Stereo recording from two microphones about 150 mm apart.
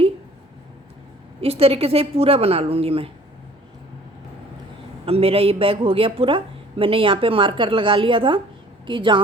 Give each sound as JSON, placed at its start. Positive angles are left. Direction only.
{"t": 1.4, "sound": "speech", "side_deg": -40}
{"t": 5.0, "sound": "speech", "side_deg": -40}